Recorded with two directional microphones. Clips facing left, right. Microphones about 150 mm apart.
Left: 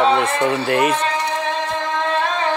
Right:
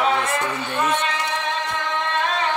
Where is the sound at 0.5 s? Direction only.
90° left.